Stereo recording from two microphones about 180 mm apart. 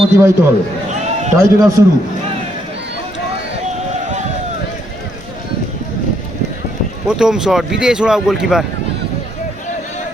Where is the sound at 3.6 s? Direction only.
40° right (ahead or behind).